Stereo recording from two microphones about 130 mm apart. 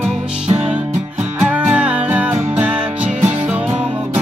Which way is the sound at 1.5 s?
10° right (ahead or behind).